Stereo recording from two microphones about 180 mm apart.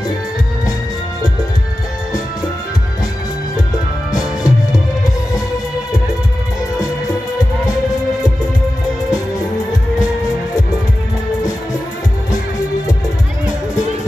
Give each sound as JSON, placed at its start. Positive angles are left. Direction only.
{"t": 4.2, "sound": "music", "side_deg": 20}